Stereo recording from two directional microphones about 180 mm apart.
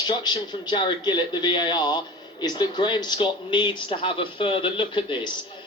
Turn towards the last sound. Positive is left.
turn(degrees=25)  # may be behind; listen again after turning